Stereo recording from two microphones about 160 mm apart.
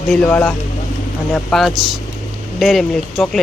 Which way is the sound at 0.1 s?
10° left (ahead or behind).